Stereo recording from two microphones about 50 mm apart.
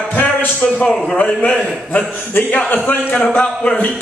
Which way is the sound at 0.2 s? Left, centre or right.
Left.